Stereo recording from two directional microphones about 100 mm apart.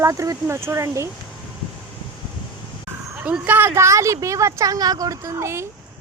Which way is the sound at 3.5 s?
20° right (ahead or behind).